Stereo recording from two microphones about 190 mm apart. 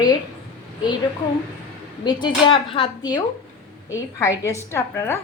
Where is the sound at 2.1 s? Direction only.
25° left (ahead or behind).